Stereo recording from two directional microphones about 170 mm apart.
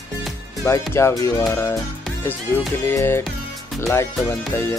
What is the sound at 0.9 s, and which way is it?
Speech, 15° left (ahead or behind).